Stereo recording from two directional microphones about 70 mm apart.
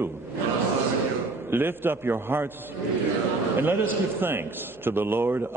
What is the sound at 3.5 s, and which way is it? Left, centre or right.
A man's voice, right.